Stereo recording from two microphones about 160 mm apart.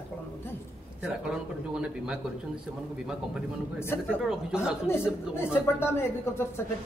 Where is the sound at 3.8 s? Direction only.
15° left (ahead or behind).